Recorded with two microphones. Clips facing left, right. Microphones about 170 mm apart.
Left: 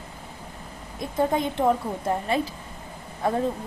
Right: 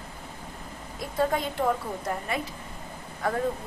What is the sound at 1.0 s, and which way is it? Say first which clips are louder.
Speech: left 3 dB; 20° left (ahead or behind).